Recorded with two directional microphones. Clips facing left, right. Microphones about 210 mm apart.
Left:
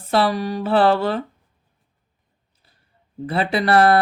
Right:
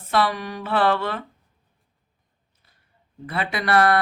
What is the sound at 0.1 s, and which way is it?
Speech, 30° left (ahead or behind).